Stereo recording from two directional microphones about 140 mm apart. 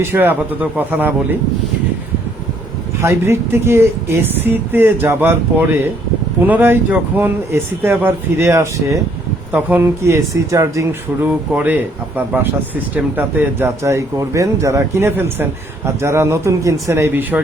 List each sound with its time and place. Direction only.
0.0 s speech: 15° right (ahead or behind)
3.0 s speech: 20° right (ahead or behind)
11.3 s a man's voice: 10° right (ahead or behind)